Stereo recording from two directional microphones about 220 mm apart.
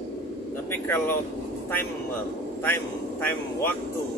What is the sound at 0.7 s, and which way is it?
Speech, 10° left (ahead or behind).